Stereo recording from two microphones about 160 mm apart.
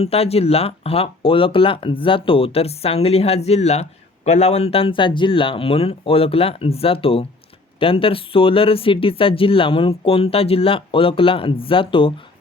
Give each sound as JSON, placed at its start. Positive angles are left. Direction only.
{"t": 0.0, "sound": "speech", "side_deg": 40}